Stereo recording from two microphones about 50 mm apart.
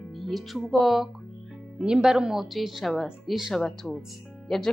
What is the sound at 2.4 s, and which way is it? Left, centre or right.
Speech, centre.